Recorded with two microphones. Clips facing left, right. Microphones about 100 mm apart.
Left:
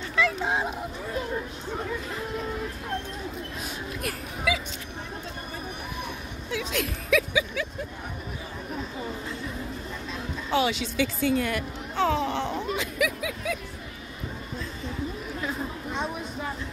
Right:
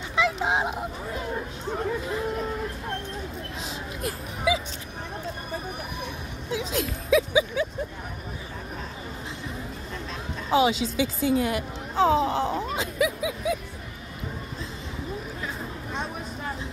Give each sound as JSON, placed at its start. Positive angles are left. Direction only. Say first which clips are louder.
{"t": 0.1, "sound": "speech", "louder": "right 2 dB", "side_deg": -20}
{"t": 4.5, "sound": "speech", "louder": "right 3 dB", "side_deg": -25}
{"t": 6.5, "sound": "speech", "louder": "right 1 dB", "side_deg": -25}
{"t": 10.5, "sound": "speech", "louder": "right 4 dB", "side_deg": -25}
{"t": 11.9, "sound": "speech", "louder": "right 4 dB", "side_deg": -30}
{"t": 12.7, "sound": "a sound", "louder": "right 2 dB", "side_deg": -25}
{"t": 15.4, "sound": "chatter", "louder": "left 3 dB", "side_deg": 0}